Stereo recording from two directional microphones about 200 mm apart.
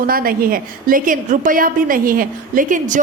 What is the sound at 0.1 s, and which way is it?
A woman's voice, 45° right (ahead or behind).